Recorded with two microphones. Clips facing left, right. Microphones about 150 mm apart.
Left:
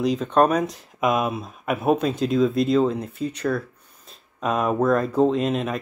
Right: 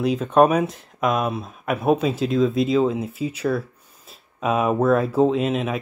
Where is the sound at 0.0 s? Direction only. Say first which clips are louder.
Right 2 dB; 5° right (ahead or behind).